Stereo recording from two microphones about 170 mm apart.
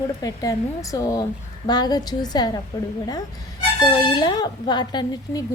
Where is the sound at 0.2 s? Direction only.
20° left (ahead or behind).